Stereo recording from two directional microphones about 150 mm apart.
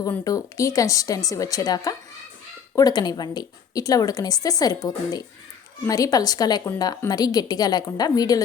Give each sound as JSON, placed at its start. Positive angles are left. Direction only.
{"t": 0.3, "sound": "a woman's voice", "side_deg": 20}